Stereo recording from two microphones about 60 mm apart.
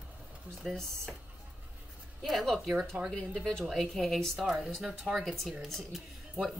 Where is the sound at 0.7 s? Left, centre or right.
Centre.